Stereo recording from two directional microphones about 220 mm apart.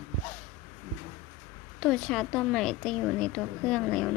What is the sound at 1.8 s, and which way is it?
Speech, 5° left (ahead or behind).